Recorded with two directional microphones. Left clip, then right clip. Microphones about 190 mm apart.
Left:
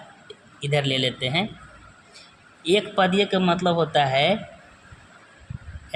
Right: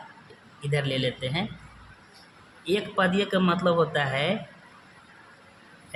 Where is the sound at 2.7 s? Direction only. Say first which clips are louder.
Left 5 dB; 25° left (ahead or behind).